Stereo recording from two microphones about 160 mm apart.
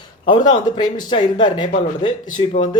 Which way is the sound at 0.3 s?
30° left (ahead or behind).